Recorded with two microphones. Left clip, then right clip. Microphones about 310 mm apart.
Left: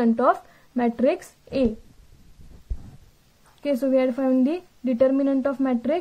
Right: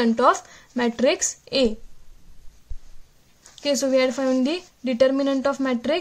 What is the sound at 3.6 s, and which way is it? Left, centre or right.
Speech, right.